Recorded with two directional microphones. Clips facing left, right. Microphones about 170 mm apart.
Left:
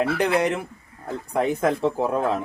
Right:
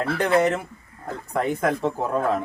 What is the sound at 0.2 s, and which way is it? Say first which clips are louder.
Speech: right 1 dB; 15° left (ahead or behind).